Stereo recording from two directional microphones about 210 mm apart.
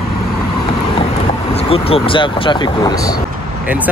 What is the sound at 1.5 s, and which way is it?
Speech, 25° left (ahead or behind).